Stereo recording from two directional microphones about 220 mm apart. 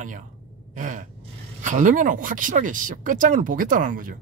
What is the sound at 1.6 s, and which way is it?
Speech, 35° right (ahead or behind).